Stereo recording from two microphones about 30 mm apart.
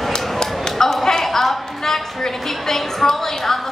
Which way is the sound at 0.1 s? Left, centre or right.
Left.